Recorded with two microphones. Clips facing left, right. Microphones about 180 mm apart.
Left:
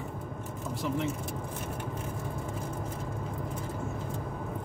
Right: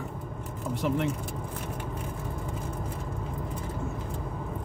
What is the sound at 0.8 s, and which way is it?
Speech, 85° right.